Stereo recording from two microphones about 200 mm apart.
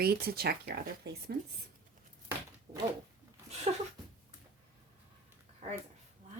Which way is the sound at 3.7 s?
30° right (ahead or behind).